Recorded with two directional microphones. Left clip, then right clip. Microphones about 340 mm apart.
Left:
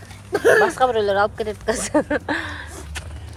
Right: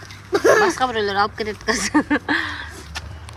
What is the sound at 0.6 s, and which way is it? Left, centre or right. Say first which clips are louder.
Speech: left 2 dB; centre.